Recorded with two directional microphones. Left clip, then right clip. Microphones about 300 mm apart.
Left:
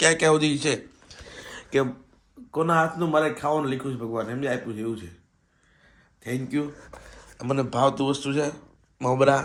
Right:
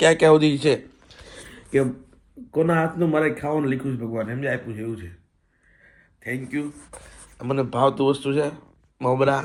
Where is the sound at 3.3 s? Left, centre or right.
Right.